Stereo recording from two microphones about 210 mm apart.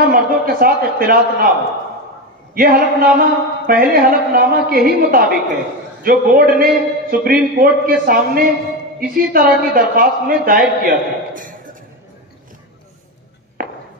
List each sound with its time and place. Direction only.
0.1 s a man's voice: 45° right (ahead or behind)
2.5 s a man's voice: 45° right (ahead or behind)
13.6 s chop: 40° right (ahead or behind)